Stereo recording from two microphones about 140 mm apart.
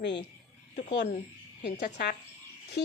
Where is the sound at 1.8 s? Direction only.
65° left (ahead or behind).